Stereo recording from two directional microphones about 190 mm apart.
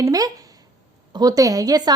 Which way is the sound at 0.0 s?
20° right (ahead or behind).